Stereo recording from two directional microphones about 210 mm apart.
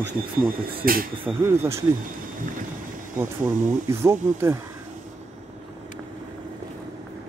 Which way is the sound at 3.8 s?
10° right (ahead or behind).